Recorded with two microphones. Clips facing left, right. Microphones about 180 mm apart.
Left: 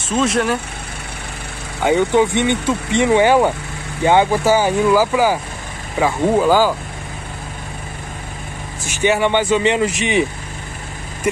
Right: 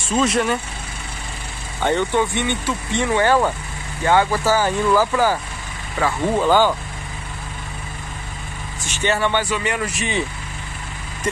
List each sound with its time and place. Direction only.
0.1 s speech: centre (ahead or behind)
1.8 s speech: 10° left (ahead or behind)
8.8 s speech: 10° left (ahead or behind)